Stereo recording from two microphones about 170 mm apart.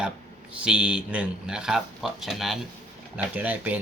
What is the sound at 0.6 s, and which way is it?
Speech, 5° right (ahead or behind).